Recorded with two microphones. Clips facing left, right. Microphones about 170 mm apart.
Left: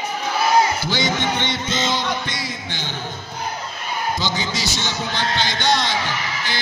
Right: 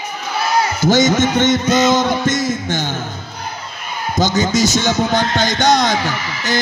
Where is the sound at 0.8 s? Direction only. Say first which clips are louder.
Right 9 dB; 45° right (ahead or behind).